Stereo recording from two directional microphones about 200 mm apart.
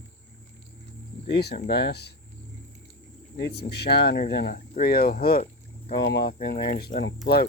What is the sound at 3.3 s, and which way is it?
Speech, 55° left (ahead or behind).